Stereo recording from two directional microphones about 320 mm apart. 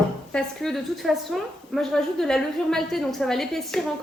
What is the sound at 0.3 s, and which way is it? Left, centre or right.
A woman's voice, centre.